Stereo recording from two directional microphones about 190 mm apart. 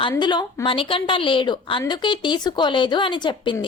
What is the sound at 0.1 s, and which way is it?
Speech, 25° left (ahead or behind).